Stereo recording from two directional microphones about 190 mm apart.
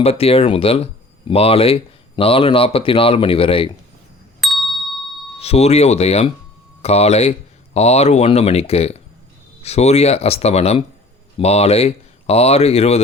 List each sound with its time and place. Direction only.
0.0 s speech: 30° left (ahead or behind)
4.4 s ding: centre (ahead or behind)
5.4 s speech: 35° left (ahead or behind)